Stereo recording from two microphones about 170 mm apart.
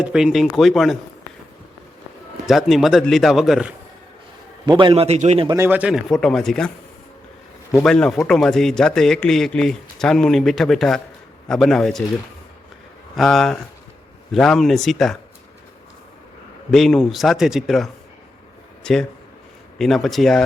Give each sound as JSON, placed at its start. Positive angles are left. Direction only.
{"t": 0.0, "sound": "a man's voice", "side_deg": -5}
{"t": 2.5, "sound": "a man's voice", "side_deg": 0}
{"t": 4.6, "sound": "a man's voice", "side_deg": -25}
{"t": 5.5, "sound": "a man's voice", "side_deg": -15}
{"t": 7.9, "sound": "a man's voice", "side_deg": 5}
{"t": 13.1, "sound": "a man's voice", "side_deg": 0}
{"t": 16.7, "sound": "a man's voice", "side_deg": 0}